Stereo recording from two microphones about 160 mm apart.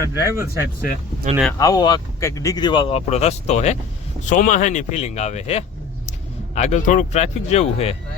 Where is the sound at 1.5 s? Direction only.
20° left (ahead or behind).